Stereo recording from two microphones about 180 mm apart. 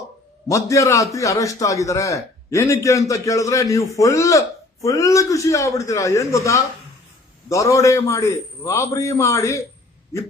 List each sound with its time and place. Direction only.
0.4 s a man's voice: 15° left (ahead or behind)